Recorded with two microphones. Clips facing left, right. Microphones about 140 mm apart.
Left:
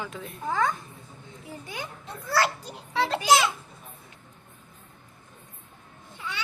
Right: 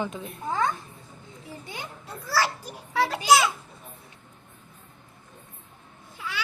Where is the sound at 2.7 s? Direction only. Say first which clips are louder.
Right 1 dB; 25° left (ahead or behind).